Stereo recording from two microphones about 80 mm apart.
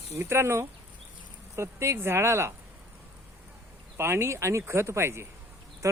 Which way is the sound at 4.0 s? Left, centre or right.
Right.